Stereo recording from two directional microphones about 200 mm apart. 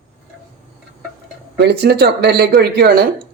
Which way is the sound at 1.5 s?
55° right (ahead or behind).